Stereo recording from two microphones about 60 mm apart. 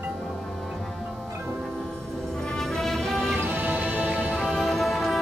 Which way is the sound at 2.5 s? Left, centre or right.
Centre.